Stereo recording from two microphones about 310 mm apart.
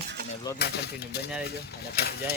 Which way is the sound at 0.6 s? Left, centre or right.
Left.